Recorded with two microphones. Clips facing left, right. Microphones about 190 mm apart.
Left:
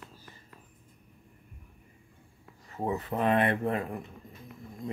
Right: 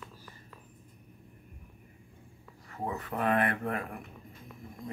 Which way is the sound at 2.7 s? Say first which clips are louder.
Left 4 dB; 25° left (ahead or behind).